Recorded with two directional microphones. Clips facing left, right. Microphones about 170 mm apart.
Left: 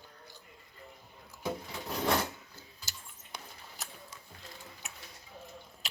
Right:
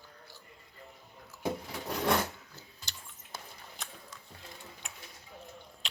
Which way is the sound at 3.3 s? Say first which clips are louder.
Right 1 dB; centre (ahead or behind).